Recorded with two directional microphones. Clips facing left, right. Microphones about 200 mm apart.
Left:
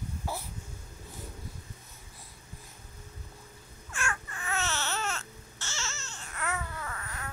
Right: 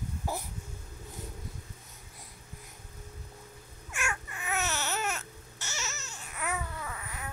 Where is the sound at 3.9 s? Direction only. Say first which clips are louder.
Even; 10° right (ahead or behind).